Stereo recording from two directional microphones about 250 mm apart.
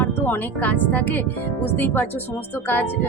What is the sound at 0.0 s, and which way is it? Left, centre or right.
A woman's voice, centre.